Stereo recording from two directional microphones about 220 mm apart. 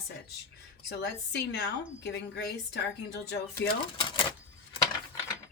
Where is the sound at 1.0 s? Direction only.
50° left (ahead or behind).